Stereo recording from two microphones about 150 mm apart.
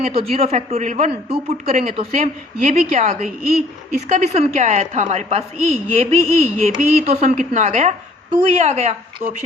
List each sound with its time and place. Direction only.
0.0 s a woman's voice: 40° right (ahead or behind)
1.6 s speech: 75° right (ahead or behind)
2.0 s a woman's voice: 50° right (ahead or behind)